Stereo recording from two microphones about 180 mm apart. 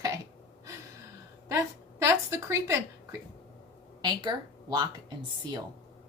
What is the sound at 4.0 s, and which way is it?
Speech, 25° right (ahead or behind).